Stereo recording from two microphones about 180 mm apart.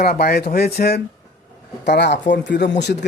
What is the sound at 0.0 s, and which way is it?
Speech, 60° left (ahead or behind).